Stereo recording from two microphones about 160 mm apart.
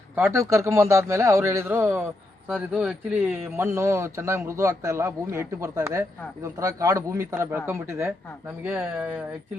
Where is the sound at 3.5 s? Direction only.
15° right (ahead or behind).